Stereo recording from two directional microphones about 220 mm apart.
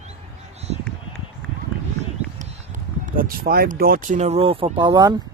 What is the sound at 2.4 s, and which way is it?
Speech, 35° right (ahead or behind).